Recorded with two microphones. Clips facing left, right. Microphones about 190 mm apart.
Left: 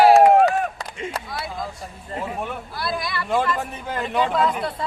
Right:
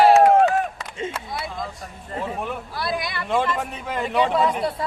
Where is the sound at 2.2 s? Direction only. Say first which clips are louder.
Right 1 dB; centre (ahead or behind).